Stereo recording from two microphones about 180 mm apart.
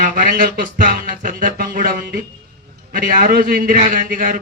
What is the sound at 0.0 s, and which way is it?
A man's voice, 50° right (ahead or behind).